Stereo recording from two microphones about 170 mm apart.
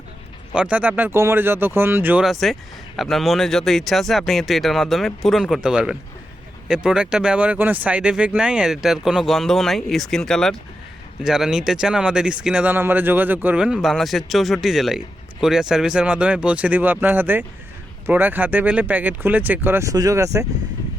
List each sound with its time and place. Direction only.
0.5 s speech: 5° right (ahead or behind)